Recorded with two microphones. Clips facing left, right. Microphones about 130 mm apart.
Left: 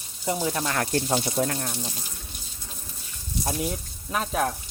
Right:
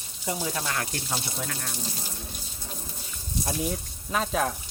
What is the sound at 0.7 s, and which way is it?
Speech, 40° left (ahead or behind).